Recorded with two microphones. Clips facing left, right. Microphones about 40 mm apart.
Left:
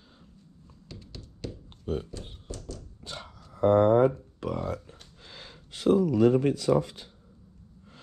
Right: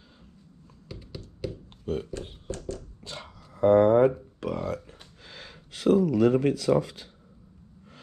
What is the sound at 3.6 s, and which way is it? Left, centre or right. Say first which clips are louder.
Speech: right 2 dB; right.